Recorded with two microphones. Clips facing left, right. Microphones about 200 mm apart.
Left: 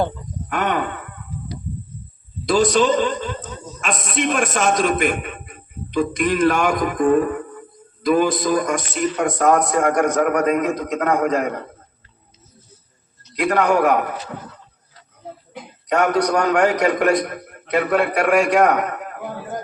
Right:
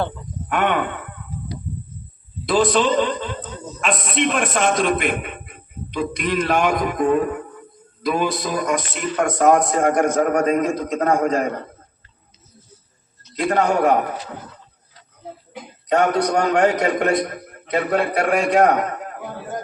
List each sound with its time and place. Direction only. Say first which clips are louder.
0.5 s groan: right 2 dB; 40° left (ahead or behind)
2.5 s a man's voice: left 1 dB; 45° left (ahead or behind)
9.5 s a man's voice: even; 25° right (ahead or behind)
13.3 s a man's voice: left 1 dB; 25° right (ahead or behind)
15.9 s a man's voice: even; 30° right (ahead or behind)